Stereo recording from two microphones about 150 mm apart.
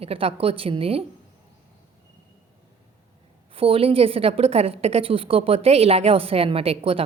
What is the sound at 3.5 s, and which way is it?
A woman's voice, 40° right (ahead or behind).